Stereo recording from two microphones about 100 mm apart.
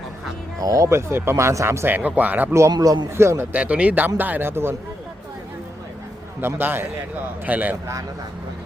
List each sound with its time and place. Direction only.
0.6 s speech: 35° right (ahead or behind); by 2.6 s 15° right (ahead or behind)
2.7 s a man's voice: 40° right (ahead or behind)
3.2 s speech: 25° right (ahead or behind)
3.5 s speech: 15° right (ahead or behind)
6.4 s speech: 20° right (ahead or behind)